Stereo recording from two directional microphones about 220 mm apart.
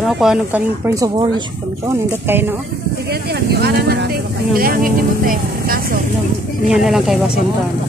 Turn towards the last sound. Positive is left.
turn(degrees=0)  # may be behind; listen again after turning